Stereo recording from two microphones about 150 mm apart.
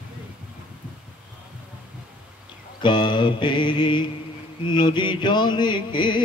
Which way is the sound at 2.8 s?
30° left (ahead or behind).